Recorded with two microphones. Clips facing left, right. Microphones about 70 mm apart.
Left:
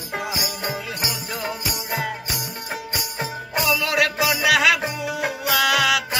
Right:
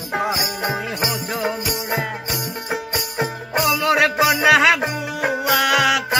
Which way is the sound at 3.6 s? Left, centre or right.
Right.